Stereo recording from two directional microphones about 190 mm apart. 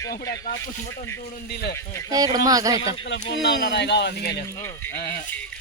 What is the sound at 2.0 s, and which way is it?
Speech, 20° right (ahead or behind).